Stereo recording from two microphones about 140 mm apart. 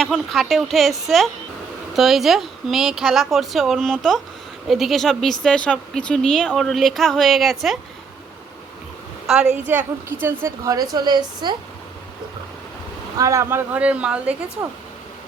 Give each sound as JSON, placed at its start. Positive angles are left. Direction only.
{"t": 0.0, "sound": "speech", "side_deg": 0}
{"t": 9.2, "sound": "a woman's voice", "side_deg": -5}
{"t": 9.6, "sound": "speech", "side_deg": -15}
{"t": 10.7, "sound": "a woman's voice", "side_deg": -25}
{"t": 13.1, "sound": "speech", "side_deg": -25}